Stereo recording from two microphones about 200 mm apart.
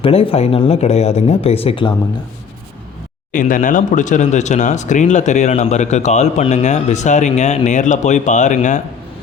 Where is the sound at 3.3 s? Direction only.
40° left (ahead or behind).